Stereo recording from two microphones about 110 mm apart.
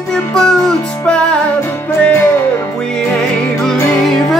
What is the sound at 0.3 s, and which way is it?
Music, 5° left (ahead or behind).